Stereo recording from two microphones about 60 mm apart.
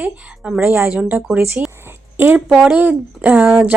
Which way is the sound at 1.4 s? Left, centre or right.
Right.